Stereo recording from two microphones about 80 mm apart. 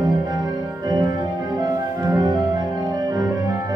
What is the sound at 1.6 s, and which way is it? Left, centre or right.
Music, right.